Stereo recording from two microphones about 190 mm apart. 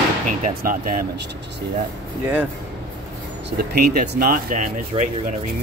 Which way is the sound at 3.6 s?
55° right (ahead or behind).